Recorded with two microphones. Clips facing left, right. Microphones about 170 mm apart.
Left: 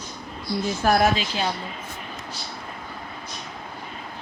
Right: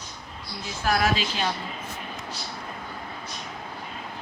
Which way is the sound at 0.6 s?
50° left (ahead or behind).